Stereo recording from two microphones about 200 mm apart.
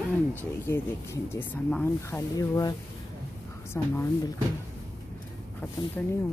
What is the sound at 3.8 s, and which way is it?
Speech, 15° left (ahead or behind).